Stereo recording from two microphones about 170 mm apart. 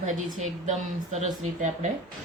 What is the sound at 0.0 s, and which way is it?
A woman's voice, 50° right (ahead or behind).